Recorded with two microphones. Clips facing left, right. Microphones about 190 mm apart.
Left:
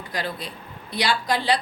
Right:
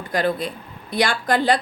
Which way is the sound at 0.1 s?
50° right (ahead or behind).